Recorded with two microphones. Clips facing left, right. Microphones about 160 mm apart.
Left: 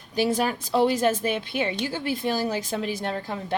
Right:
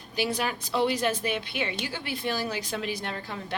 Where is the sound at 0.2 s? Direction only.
45° left (ahead or behind).